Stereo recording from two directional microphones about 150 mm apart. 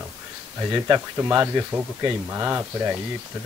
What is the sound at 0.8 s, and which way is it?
Speech, 15° right (ahead or behind).